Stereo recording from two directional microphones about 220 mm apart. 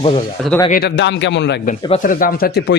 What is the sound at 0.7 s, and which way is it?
Speech, 50° left (ahead or behind).